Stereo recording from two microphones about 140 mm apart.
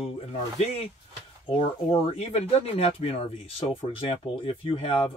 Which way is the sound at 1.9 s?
45° left (ahead or behind).